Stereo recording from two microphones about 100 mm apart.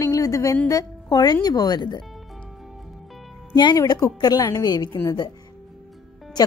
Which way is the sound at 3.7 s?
35° left (ahead or behind).